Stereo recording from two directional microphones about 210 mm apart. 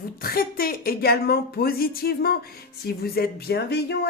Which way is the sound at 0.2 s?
45° left (ahead or behind).